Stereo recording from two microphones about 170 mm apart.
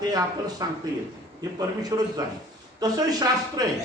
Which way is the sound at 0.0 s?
25° right (ahead or behind).